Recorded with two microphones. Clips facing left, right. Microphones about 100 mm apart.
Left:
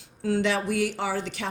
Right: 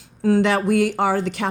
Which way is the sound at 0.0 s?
50° right (ahead or behind).